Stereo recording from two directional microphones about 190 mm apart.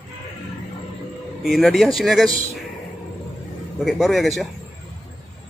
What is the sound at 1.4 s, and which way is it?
Speech, centre (ahead or behind).